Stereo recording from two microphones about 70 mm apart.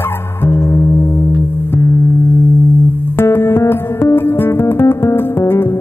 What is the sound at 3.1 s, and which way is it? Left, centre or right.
Music, left.